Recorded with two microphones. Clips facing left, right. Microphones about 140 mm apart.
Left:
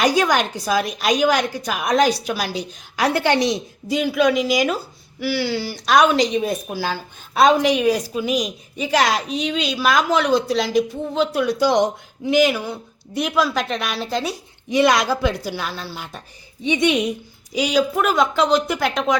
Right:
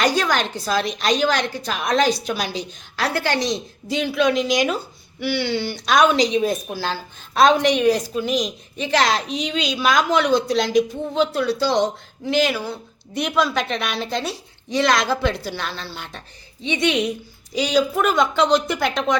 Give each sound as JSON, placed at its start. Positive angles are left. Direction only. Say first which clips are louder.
{"t": 0.0, "sound": "a woman's voice", "louder": "left 2 dB", "side_deg": 15}
{"t": 3.8, "sound": "a woman's voice", "louder": "left 2 dB", "side_deg": 10}
{"t": 11.3, "sound": "a woman's voice", "louder": "left 2 dB", "side_deg": 15}
{"t": 13.1, "sound": "a woman's voice", "louder": "left 1 dB", "side_deg": 5}